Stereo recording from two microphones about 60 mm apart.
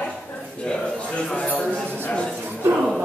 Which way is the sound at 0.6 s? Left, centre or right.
Centre.